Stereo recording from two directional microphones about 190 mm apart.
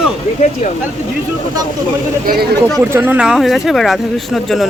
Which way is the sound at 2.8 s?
10° right (ahead or behind).